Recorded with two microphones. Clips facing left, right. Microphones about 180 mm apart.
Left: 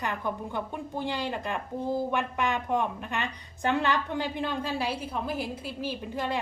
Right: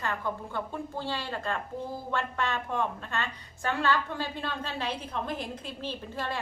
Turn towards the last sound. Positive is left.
turn(degrees=15)  # may be behind; listen again after turning